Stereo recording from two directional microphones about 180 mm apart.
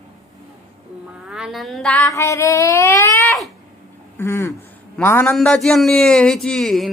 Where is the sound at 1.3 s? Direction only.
Centre (ahead or behind).